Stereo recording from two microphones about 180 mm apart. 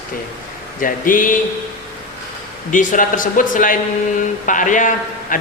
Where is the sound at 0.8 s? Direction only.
50° left (ahead or behind).